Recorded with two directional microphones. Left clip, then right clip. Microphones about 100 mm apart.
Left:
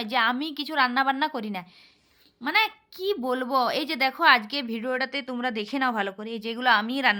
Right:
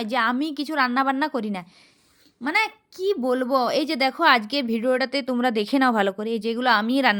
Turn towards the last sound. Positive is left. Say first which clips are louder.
# right 2 dB
turn(degrees=-50)  # may be behind; listen again after turning